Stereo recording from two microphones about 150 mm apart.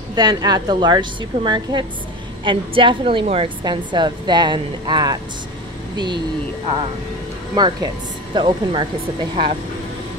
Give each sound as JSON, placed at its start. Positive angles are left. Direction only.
{"t": 0.1, "sound": "a woman's voice", "side_deg": -25}
{"t": 7.5, "sound": "a woman's voice", "side_deg": -30}